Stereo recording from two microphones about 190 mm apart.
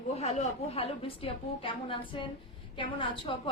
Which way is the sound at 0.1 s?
35° left (ahead or behind).